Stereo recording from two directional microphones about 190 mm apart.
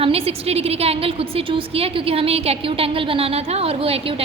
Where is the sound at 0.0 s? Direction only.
30° right (ahead or behind).